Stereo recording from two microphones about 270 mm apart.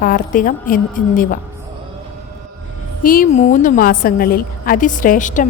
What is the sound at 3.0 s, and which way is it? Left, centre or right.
A woman's voice, left.